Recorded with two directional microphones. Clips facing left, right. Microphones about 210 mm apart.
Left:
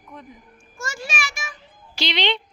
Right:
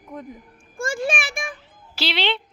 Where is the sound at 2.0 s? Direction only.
5° right (ahead or behind).